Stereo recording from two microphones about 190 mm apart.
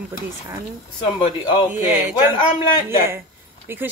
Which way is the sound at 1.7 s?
10° right (ahead or behind).